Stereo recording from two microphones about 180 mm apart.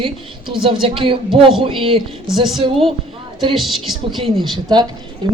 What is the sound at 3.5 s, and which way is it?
Speech, centre (ahead or behind).